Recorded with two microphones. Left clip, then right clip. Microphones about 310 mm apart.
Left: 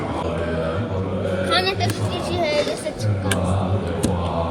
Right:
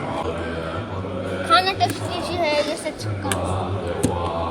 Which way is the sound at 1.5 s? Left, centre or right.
Centre.